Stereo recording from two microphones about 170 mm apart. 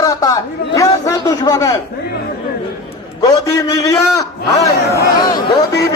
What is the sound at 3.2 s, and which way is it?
A man's voice, 20° left (ahead or behind).